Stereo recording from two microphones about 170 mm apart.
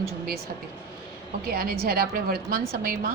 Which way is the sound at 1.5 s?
65° right (ahead or behind).